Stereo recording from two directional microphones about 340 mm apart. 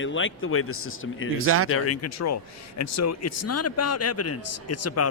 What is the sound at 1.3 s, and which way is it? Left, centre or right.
Speech, right.